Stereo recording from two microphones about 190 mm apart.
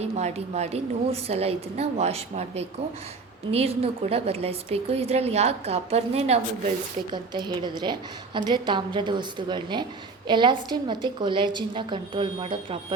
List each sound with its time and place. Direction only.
0.0 s a woman's voice: 35° right (ahead or behind)